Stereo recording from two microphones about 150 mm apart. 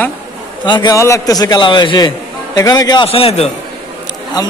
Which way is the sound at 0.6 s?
30° left (ahead or behind).